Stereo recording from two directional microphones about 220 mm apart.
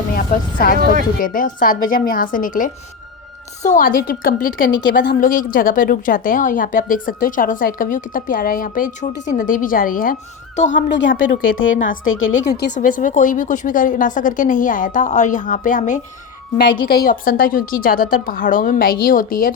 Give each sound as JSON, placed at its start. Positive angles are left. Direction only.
{"t": 0.1, "sound": "a woman's voice", "side_deg": 40}
{"t": 10.8, "sound": "speech", "side_deg": 55}
{"t": 11.1, "sound": "a woman's voice", "side_deg": 40}
{"t": 11.6, "sound": "speech", "side_deg": 60}
{"t": 12.5, "sound": "speech", "side_deg": 45}
{"t": 12.7, "sound": "a woman's voice", "side_deg": 35}
{"t": 16.6, "sound": "a woman's voice", "side_deg": 45}